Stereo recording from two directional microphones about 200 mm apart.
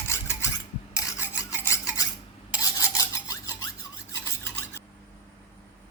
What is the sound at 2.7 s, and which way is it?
Filing, 15° left (ahead or behind).